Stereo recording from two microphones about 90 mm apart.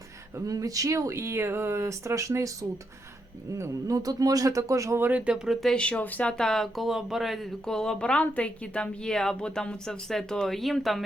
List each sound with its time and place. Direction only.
0.3 s speech: 40° right (ahead or behind)
4.9 s speech: 20° right (ahead or behind)
5.5 s speech: 10° left (ahead or behind)